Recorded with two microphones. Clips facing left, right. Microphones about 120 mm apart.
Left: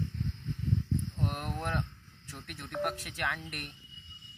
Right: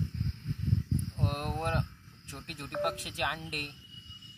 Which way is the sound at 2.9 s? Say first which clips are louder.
Right 1 dB; 15° right (ahead or behind).